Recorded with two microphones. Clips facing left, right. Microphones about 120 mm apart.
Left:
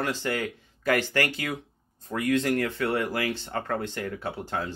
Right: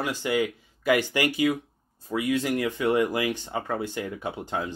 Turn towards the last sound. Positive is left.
turn(degrees=-15)  # may be behind; listen again after turning